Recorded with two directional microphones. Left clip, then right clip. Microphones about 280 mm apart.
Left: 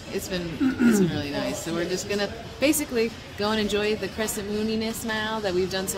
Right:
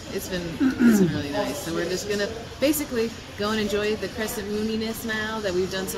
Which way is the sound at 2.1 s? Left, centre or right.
Centre.